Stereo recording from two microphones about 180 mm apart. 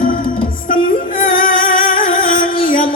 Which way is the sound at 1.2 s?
50° left (ahead or behind).